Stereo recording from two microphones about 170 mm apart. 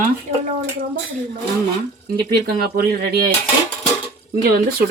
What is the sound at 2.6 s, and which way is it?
Speech, 65° right (ahead or behind).